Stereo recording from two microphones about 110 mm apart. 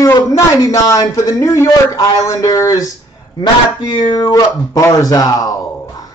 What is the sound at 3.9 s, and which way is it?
Speech, 45° left (ahead or behind).